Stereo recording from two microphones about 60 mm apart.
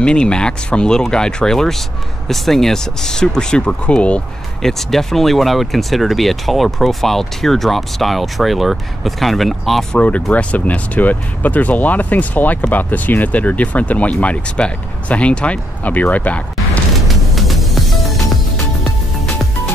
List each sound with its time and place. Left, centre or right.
0.0 s speech: centre
4.6 s speech: centre
9.9 s speech: left
17.4 s music: centre